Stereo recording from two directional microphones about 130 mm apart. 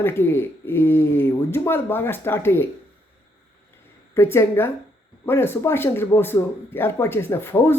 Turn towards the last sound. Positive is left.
turn(degrees=15)  # may be behind; listen again after turning